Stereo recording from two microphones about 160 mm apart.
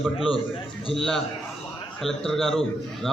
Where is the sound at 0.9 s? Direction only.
Centre (ahead or behind).